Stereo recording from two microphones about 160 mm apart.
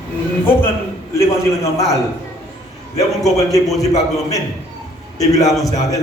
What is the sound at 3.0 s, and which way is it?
Speech, 45° left (ahead or behind).